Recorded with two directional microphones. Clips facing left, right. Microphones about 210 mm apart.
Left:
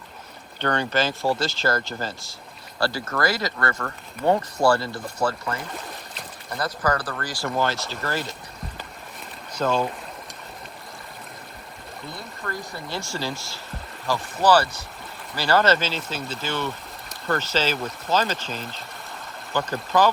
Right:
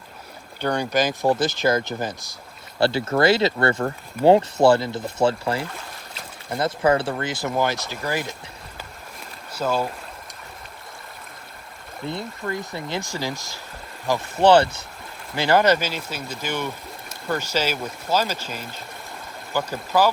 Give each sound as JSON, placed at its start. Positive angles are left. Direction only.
{"t": 0.6, "sound": "speech", "side_deg": -10}
{"t": 7.4, "sound": "speech", "side_deg": -10}
{"t": 9.5, "sound": "speech", "side_deg": -5}
{"t": 12.0, "sound": "speech", "side_deg": -20}